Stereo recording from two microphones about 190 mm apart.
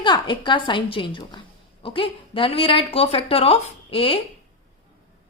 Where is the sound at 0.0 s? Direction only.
25° left (ahead or behind).